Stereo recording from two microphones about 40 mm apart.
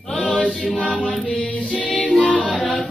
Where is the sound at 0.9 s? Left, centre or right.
Left.